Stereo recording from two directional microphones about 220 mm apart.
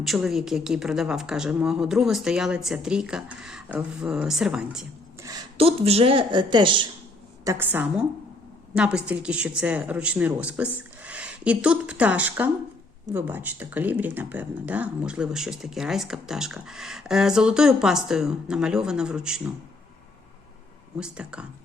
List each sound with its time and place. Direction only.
0.0 s speech: centre (ahead or behind)
5.2 s speech: 20° right (ahead or behind)
7.4 s a woman's voice: 10° right (ahead or behind)
21.0 s speech: 5° right (ahead or behind)